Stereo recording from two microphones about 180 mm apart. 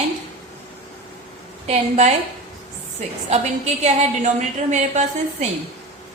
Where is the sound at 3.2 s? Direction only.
40° right (ahead or behind).